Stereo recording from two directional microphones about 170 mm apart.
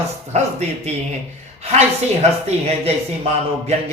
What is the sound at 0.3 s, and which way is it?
Speech, 40° right (ahead or behind).